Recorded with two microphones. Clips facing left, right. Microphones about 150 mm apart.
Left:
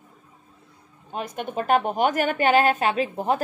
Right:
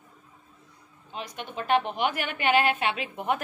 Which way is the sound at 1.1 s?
50° left (ahead or behind).